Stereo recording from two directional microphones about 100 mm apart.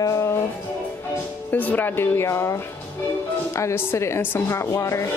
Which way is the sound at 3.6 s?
25° left (ahead or behind).